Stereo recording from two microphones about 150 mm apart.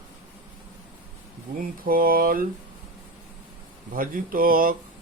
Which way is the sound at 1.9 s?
75° right (ahead or behind).